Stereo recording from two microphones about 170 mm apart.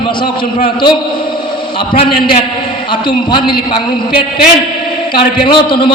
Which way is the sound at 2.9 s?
30° left (ahead or behind).